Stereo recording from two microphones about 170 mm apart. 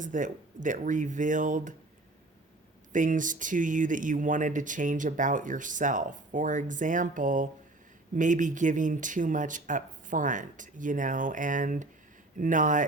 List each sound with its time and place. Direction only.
0.0 s speech: 50° right (ahead or behind)
2.9 s speech: 50° right (ahead or behind)